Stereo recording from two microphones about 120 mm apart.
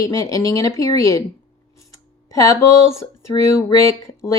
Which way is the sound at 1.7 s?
25° left (ahead or behind).